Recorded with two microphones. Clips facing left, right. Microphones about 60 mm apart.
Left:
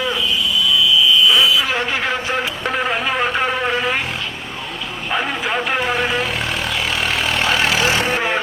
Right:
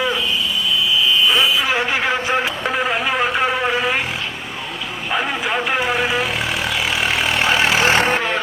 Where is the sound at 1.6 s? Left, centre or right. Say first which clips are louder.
Right 1 dB; centre.